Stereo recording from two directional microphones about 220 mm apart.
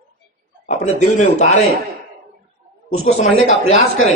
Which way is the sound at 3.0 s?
30° left (ahead or behind).